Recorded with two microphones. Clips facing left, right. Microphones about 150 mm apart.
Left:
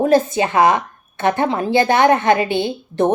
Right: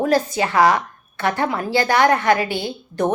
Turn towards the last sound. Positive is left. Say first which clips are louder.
# left 4 dB
turn(degrees=25)  # may be behind; listen again after turning